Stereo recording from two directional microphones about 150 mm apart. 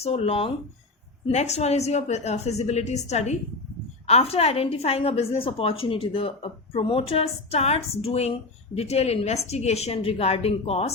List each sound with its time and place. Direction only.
0.0 s a woman's voice: 40° left (ahead or behind)